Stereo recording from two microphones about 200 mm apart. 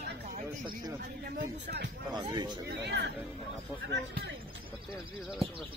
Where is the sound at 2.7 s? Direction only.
60° right (ahead or behind).